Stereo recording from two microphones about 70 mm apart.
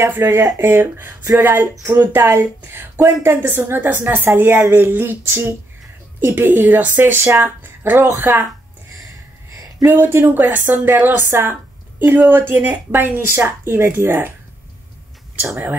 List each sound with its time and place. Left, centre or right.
0.0 s a woman's voice: right
9.8 s a woman's voice: right